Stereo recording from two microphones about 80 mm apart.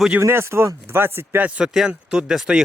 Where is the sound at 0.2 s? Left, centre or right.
Right.